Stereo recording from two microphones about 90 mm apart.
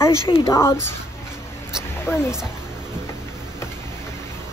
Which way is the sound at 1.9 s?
25° left (ahead or behind).